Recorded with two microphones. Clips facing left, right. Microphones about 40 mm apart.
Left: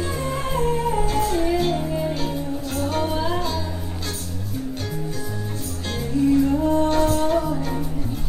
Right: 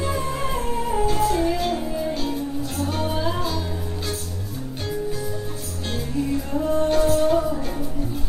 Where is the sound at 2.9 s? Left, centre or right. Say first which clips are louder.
Left 2 dB; centre.